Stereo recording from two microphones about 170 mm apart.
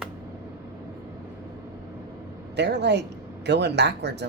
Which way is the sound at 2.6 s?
90° right.